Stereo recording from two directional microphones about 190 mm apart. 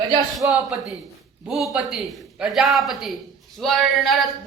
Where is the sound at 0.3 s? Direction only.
Centre (ahead or behind).